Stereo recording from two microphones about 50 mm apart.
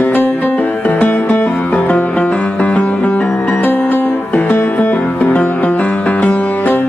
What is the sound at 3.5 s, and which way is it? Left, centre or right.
Music, left.